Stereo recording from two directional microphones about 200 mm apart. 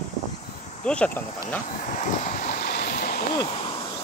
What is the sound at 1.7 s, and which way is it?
Vehicle, 40° left (ahead or behind).